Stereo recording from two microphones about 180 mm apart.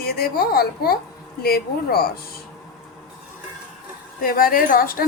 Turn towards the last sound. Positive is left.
turn(degrees=55)  # may be behind; listen again after turning